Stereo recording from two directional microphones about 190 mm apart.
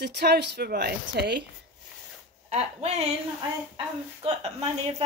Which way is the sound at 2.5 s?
35° right (ahead or behind).